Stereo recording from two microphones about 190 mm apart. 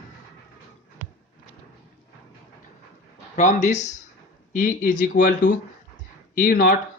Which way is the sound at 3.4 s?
40° left (ahead or behind).